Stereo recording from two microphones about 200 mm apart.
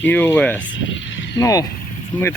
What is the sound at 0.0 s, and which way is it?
Speech, 10° left (ahead or behind).